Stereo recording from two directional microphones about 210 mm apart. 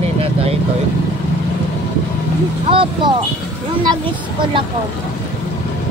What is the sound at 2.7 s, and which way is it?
Speech, 25° right (ahead or behind).